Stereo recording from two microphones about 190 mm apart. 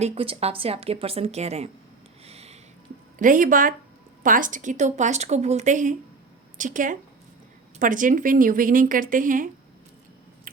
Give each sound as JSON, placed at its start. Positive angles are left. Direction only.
{"t": 0.0, "sound": "a woman's voice", "side_deg": -30}
{"t": 2.2, "sound": "a sound", "side_deg": -35}
{"t": 3.2, "sound": "a woman's voice", "side_deg": -45}